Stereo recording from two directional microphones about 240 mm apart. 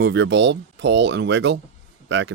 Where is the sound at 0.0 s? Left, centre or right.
Right.